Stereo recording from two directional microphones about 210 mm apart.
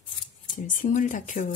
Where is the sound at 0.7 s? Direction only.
40° left (ahead or behind).